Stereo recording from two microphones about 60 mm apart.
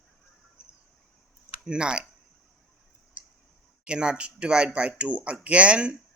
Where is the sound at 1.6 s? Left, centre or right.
Centre.